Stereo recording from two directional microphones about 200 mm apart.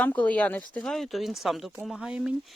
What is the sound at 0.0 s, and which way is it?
Speech, 5° left (ahead or behind).